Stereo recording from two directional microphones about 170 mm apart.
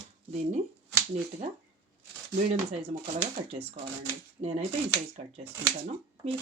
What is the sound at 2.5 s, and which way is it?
Speech, 40° right (ahead or behind).